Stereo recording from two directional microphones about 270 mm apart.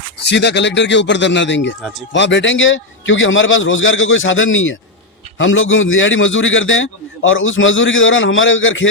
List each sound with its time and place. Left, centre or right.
0.3 s speech: left
1.8 s speech: centre
2.1 s a man's voice: left